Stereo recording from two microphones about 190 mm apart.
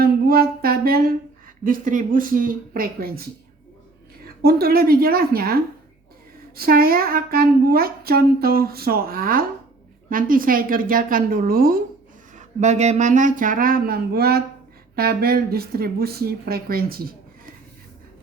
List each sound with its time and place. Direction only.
0.0 s a sound: 50° right (ahead or behind)
1.6 s speech: 45° right (ahead or behind)
4.4 s speech: 55° right (ahead or behind)
6.6 s speech: 50° right (ahead or behind)
12.4 s speech: 40° right (ahead or behind)